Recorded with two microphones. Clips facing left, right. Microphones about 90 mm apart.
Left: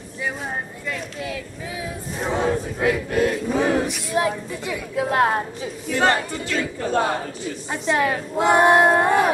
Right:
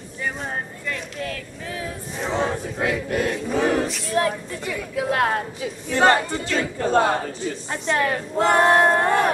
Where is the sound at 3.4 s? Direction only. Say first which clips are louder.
Left 1 dB; 10° left (ahead or behind).